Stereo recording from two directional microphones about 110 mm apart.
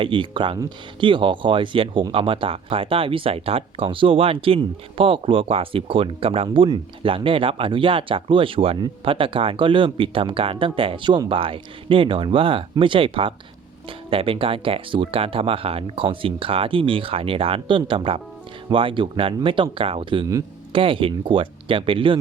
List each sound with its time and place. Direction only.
0.0 s speech: 50° right (ahead or behind)